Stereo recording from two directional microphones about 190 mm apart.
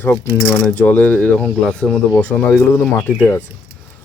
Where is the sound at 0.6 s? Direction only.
5° left (ahead or behind).